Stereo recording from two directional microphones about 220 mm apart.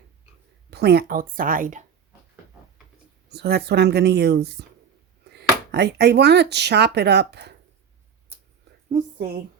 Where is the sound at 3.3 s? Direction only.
45° right (ahead or behind).